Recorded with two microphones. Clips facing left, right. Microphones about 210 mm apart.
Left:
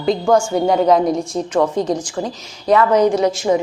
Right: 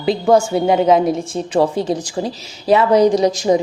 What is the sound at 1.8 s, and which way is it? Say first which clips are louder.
A woman's voice: even; 30° right (ahead or behind).